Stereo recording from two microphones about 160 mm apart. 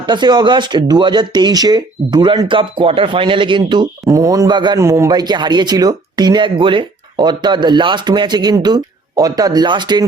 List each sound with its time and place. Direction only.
0.0 s speech: 25° right (ahead or behind)